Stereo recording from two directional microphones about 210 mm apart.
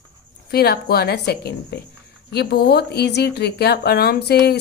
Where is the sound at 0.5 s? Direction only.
50° left (ahead or behind).